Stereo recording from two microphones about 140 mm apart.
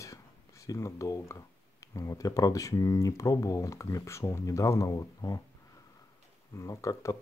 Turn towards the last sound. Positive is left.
turn(degrees=20)  # may be behind; listen again after turning